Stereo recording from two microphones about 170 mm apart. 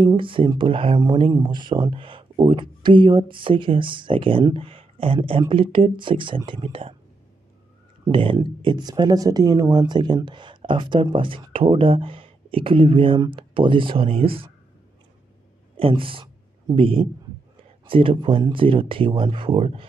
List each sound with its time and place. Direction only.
0.0 s speech: 30° right (ahead or behind)
8.1 s speech: 30° right (ahead or behind)
15.7 s a man's voice: 30° right (ahead or behind)